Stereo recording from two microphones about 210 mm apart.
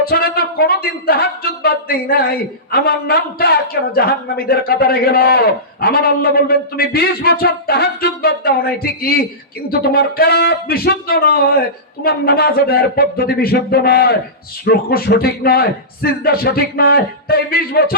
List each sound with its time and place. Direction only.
0.0 s a man's voice: 45° left (ahead or behind)